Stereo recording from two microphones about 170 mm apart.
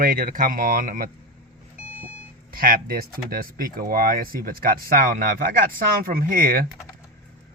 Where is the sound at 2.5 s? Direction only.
60° right (ahead or behind).